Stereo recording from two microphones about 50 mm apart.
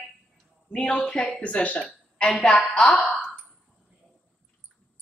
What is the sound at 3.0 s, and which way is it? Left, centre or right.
Speech, right.